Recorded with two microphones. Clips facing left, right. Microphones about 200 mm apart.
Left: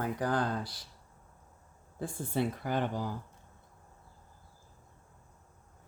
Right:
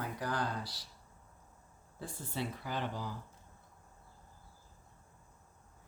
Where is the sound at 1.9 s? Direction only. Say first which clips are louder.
Left 8 dB; 50° left (ahead or behind).